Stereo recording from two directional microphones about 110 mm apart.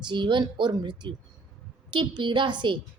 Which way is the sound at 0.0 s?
45° right (ahead or behind).